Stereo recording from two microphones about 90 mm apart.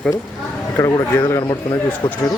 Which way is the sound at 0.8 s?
30° left (ahead or behind).